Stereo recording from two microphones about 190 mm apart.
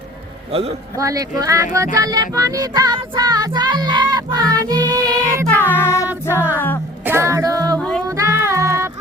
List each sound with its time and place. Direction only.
0.9 s a sound: 20° right (ahead or behind)
5.5 s music: 10° left (ahead or behind)
6.3 s music: 10° right (ahead or behind)
7.0 s female singing: 15° right (ahead or behind)
7.8 s music: 5° left (ahead or behind)
8.1 s music: 15° right (ahead or behind)